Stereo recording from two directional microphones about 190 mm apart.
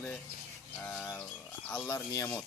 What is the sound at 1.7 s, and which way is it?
Speech, 15° left (ahead or behind).